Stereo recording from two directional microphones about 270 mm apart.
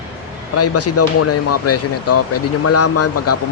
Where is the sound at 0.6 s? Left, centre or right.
Left.